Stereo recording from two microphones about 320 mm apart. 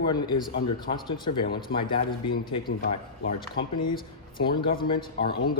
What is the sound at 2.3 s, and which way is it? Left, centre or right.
A man's voice, left.